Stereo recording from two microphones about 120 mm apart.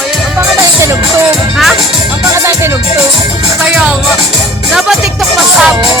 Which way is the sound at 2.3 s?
25° right (ahead or behind).